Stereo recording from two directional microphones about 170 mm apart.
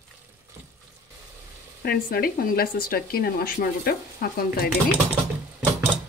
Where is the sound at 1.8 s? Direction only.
60° left (ahead or behind).